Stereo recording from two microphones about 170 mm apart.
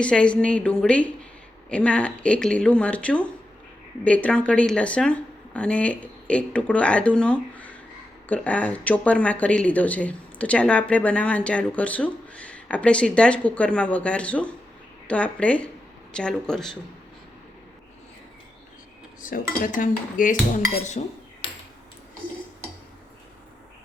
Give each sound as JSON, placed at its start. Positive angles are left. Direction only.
{"t": 0.0, "sound": "speech", "side_deg": 5}
{"t": 19.2, "sound": "dishes", "side_deg": 55}
{"t": 21.4, "sound": "a sound", "side_deg": 30}